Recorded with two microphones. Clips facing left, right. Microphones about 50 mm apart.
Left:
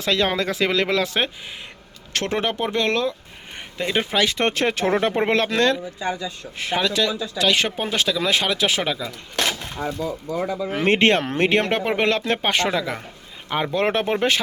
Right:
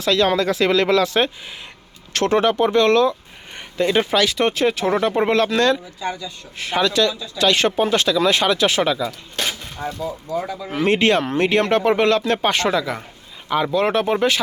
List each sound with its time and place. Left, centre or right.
0.0 s speech: left; by 4.2 s centre
4.4 s speech: left
4.9 s speech: left
6.7 s speech: centre
9.4 s a sound: left
10.7 s speech: left
11.7 s speech: centre
13.5 s speech: left